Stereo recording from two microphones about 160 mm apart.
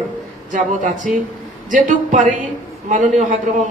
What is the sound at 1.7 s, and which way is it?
A woman's voice, 50° right (ahead or behind).